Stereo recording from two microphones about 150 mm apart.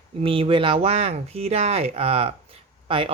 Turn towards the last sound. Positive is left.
turn(degrees=-35)  # may be behind; listen again after turning